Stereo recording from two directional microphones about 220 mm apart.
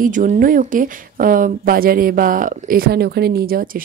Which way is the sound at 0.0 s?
35° right (ahead or behind).